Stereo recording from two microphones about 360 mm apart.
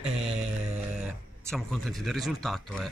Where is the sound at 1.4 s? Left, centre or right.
Centre.